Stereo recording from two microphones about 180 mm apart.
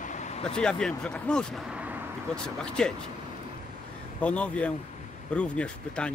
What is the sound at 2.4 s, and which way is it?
Speech, 5° left (ahead or behind).